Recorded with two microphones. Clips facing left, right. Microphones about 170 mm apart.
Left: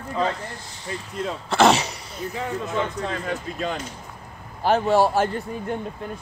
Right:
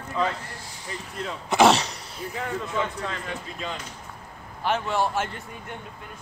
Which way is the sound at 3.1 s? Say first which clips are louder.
Left 6 dB; 45° left (ahead or behind).